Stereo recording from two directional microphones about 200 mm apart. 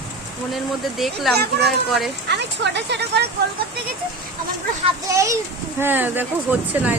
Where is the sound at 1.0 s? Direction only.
Centre (ahead or behind).